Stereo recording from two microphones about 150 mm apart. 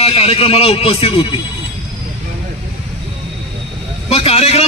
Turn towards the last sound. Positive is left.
turn(degrees=45)  # may be behind; listen again after turning